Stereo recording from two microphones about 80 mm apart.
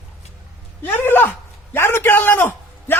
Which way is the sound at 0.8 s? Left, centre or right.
Left.